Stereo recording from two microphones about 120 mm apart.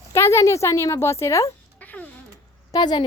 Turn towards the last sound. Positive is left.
turn(degrees=35)  # may be behind; listen again after turning